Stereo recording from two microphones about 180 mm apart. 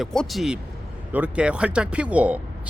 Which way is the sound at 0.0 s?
Centre (ahead or behind).